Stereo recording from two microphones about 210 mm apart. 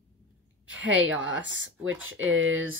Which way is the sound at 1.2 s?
65° right (ahead or behind).